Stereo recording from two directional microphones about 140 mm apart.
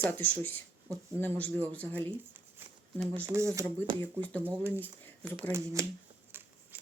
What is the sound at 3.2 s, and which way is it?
Speech, 20° right (ahead or behind).